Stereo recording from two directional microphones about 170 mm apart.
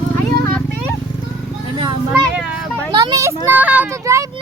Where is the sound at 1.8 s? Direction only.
25° right (ahead or behind).